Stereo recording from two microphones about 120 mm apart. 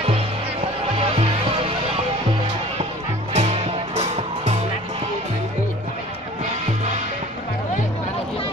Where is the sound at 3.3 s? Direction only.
65° right (ahead or behind).